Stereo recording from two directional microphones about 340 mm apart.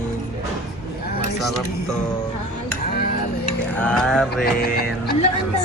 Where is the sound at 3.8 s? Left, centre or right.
Centre.